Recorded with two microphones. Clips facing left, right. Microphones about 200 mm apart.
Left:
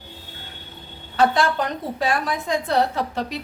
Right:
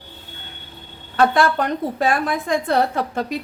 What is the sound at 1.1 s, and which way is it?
A woman's voice, 55° right (ahead or behind).